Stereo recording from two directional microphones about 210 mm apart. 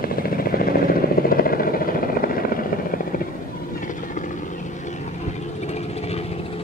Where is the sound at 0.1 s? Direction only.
45° left (ahead or behind).